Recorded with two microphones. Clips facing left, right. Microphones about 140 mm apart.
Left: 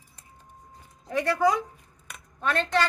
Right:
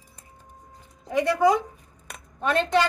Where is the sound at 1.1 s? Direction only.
10° right (ahead or behind).